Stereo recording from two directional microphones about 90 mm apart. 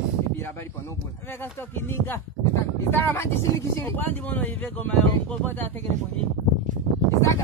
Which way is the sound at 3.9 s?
20° left (ahead or behind).